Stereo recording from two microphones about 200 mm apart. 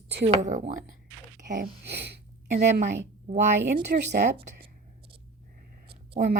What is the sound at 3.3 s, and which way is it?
Speech, 40° right (ahead or behind).